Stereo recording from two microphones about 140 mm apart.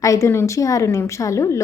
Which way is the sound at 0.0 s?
20° left (ahead or behind).